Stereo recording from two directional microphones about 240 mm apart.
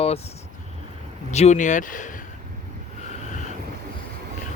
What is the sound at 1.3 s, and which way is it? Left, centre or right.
Speech, left.